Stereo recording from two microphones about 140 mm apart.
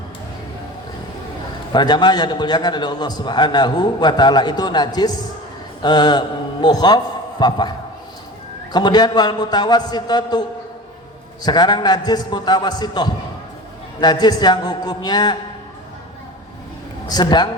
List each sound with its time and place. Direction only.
1.7 s a man's voice: 30° left (ahead or behind)
8.7 s a man's voice: 30° left (ahead or behind)
11.4 s a man's voice: 30° left (ahead or behind)
17.1 s a man's voice: 30° left (ahead or behind)